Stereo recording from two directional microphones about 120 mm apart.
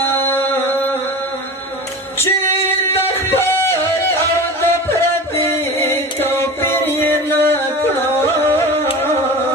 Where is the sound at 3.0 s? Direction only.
20° left (ahead or behind).